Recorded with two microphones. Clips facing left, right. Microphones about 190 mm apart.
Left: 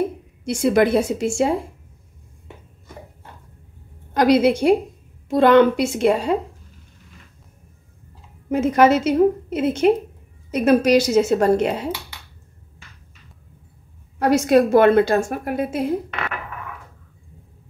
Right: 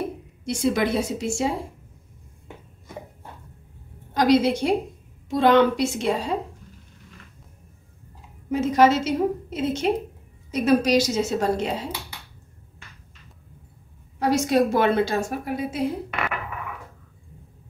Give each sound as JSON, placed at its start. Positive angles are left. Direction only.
{"t": 0.6, "sound": "a woman's voice", "side_deg": 55}
{"t": 4.1, "sound": "a woman's voice", "side_deg": 60}
{"t": 8.5, "sound": "a woman's voice", "side_deg": 60}
{"t": 14.2, "sound": "a woman's voice", "side_deg": 60}